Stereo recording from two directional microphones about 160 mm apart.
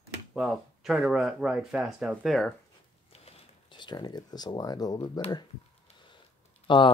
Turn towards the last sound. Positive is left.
turn(degrees=30)  # may be behind; listen again after turning